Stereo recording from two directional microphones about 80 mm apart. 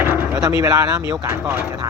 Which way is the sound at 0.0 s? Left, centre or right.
Right.